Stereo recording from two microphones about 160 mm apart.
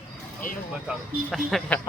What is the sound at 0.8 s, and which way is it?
Speech, centre (ahead or behind).